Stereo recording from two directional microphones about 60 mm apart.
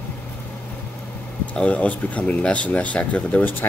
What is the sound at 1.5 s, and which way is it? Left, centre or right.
Speech, left.